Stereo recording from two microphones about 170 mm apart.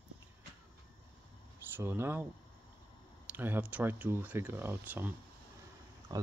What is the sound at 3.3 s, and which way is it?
Speech, 10° right (ahead or behind).